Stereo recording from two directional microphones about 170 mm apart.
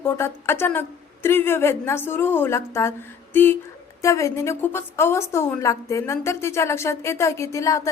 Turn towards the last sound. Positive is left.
turn(degrees=20)  # may be behind; listen again after turning